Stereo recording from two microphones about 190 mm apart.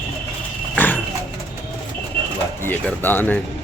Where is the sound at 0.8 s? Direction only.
10° left (ahead or behind).